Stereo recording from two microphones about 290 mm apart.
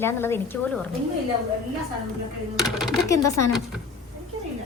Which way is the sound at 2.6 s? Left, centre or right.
Centre.